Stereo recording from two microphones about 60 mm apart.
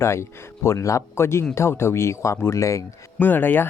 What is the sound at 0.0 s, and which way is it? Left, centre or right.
Speech, left.